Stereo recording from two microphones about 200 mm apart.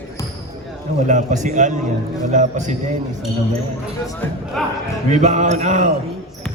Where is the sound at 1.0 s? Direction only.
35° right (ahead or behind).